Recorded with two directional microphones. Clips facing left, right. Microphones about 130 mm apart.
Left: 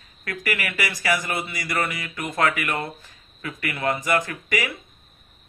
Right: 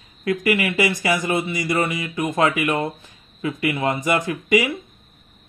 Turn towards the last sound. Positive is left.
turn(degrees=-20)  # may be behind; listen again after turning